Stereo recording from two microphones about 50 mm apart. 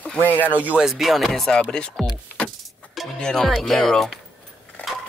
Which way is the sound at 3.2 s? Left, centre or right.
Centre.